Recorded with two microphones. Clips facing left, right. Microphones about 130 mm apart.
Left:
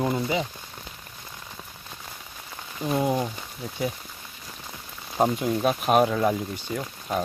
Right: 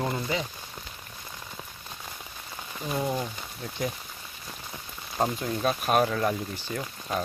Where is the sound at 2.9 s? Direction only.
20° left (ahead or behind).